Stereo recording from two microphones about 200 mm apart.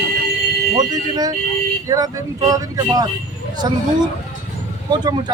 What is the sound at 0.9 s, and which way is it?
Speech, 20° right (ahead or behind).